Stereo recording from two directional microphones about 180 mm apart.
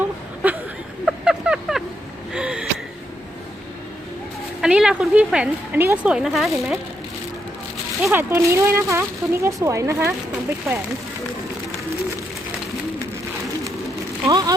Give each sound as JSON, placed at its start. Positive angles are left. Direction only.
{"t": 0.4, "sound": "a sound", "side_deg": -10}
{"t": 4.6, "sound": "speech", "side_deg": -5}
{"t": 8.1, "sound": "speech", "side_deg": -15}
{"t": 14.3, "sound": "speech", "side_deg": -20}